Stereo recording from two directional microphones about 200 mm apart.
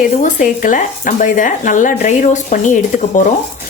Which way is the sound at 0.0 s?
40° left (ahead or behind).